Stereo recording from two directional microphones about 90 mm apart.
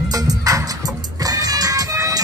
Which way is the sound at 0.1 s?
40° right (ahead or behind).